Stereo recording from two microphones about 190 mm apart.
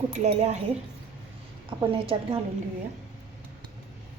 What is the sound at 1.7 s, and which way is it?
Speech, 25° right (ahead or behind).